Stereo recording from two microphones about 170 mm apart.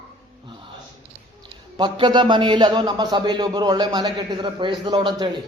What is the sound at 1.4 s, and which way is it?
A man's voice, 25° right (ahead or behind).